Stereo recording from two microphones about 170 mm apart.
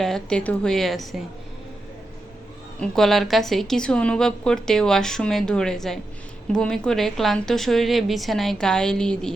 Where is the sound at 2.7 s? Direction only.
Centre (ahead or behind).